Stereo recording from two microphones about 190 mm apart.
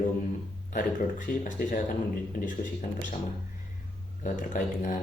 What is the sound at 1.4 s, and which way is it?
Speech, 45° left (ahead or behind).